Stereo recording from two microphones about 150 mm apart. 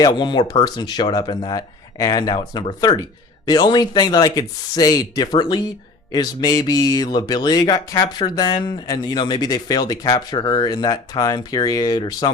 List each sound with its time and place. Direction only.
0.0 s speech: 30° left (ahead or behind)